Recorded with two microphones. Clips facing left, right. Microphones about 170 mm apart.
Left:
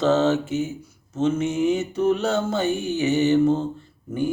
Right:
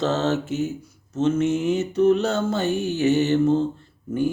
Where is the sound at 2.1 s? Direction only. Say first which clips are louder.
Right 2 dB; centre (ahead or behind).